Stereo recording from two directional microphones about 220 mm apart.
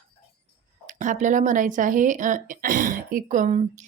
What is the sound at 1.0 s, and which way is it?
A woman's voice, 35° right (ahead or behind).